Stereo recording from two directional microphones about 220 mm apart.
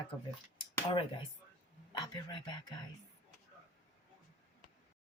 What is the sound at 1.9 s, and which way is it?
Speech, 20° left (ahead or behind).